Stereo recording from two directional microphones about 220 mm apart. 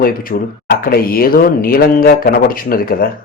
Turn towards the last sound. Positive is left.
turn(degrees=40)  # may be behind; listen again after turning